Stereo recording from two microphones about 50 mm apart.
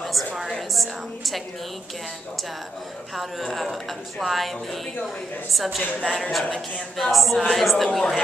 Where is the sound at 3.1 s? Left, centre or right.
Centre.